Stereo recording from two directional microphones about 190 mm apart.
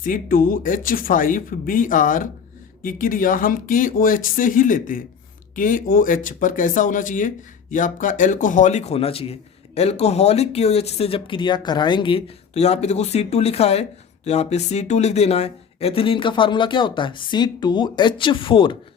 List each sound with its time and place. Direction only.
0.0 s speech: 45° left (ahead or behind); by 18.8 s 25° left (ahead or behind)